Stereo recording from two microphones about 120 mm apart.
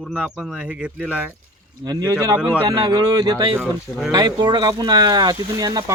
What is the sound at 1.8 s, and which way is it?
Speech, 35° right (ahead or behind).